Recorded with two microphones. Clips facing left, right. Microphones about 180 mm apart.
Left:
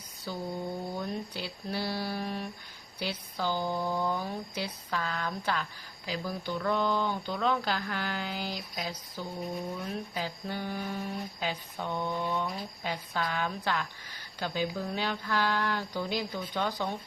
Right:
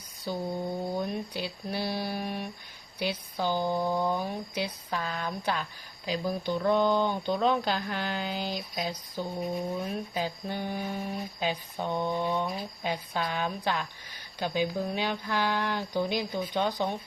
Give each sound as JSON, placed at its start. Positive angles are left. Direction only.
{"t": 0.3, "sound": "a woman's voice", "side_deg": -20}